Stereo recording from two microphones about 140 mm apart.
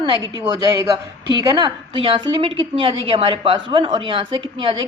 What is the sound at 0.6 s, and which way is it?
A woman's voice, 25° right (ahead or behind).